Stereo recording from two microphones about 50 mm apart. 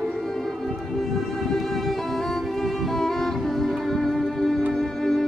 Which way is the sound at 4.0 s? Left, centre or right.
Centre.